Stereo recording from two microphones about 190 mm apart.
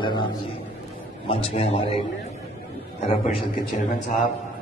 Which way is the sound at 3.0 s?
45° left (ahead or behind).